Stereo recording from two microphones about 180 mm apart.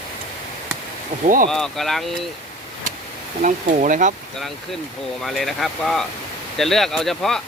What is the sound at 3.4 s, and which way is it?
Speech, 45° right (ahead or behind).